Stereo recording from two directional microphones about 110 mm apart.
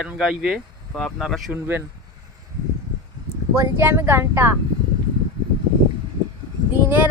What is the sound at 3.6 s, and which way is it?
Speech, 20° right (ahead or behind).